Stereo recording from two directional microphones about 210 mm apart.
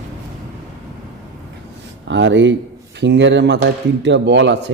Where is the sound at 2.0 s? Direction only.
60° right (ahead or behind).